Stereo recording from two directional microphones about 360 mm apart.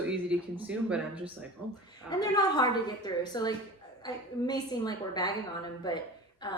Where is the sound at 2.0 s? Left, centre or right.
Centre.